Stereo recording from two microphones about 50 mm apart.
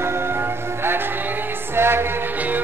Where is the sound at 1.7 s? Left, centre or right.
Right.